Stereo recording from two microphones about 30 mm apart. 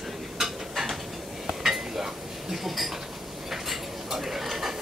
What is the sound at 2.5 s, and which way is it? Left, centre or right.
Cutlery, centre.